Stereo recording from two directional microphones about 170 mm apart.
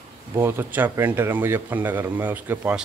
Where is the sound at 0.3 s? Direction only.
15° right (ahead or behind).